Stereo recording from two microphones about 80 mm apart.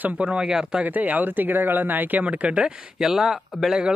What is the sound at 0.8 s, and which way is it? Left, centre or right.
Speech, right.